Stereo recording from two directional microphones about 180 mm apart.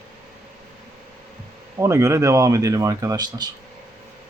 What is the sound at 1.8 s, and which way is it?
Speech, 15° right (ahead or behind).